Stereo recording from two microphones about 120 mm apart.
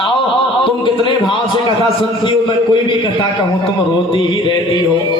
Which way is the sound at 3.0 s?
45° left (ahead or behind).